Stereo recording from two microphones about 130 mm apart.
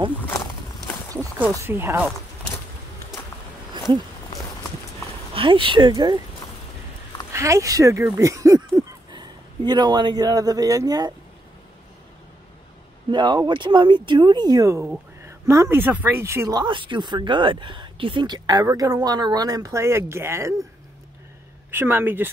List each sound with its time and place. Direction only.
1.6 s speech: 20° right (ahead or behind)
5.3 s speech: 40° right (ahead or behind)
7.3 s speech: 20° right (ahead or behind)
13.1 s speech: 35° right (ahead or behind)
21.6 s speech: 15° right (ahead or behind)